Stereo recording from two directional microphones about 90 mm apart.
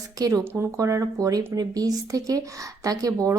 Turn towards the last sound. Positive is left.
turn(degrees=-40)  # may be behind; listen again after turning